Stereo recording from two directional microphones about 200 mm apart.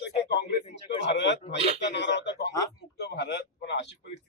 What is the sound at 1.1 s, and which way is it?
Speech, 60° left (ahead or behind).